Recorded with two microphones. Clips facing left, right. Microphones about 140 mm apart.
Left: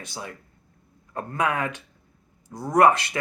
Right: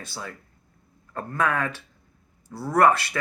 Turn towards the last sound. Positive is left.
turn(degrees=20)  # may be behind; listen again after turning